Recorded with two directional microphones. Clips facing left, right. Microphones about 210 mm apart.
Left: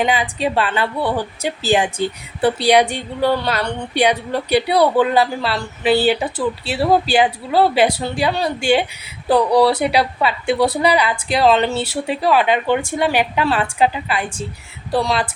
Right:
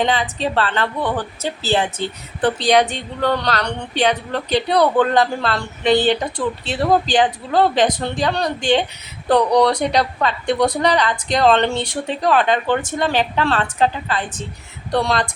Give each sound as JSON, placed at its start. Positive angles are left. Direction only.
{"t": 0.0, "sound": "a woman's voice", "side_deg": 10}